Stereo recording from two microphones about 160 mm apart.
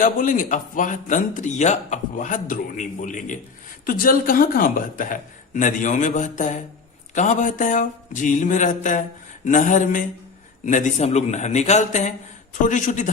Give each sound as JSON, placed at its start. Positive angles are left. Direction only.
{"t": 0.0, "sound": "a man's voice", "side_deg": 60}
{"t": 3.8, "sound": "a man's voice", "side_deg": 65}